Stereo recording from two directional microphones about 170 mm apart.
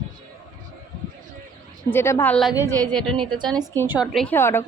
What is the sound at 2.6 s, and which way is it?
Speech, 25° right (ahead or behind).